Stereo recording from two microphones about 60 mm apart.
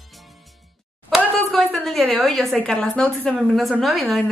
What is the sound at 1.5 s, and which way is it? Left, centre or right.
A woman's voice, centre.